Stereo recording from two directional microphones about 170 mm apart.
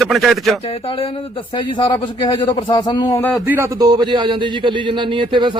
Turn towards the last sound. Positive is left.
turn(degrees=-30)  # may be behind; listen again after turning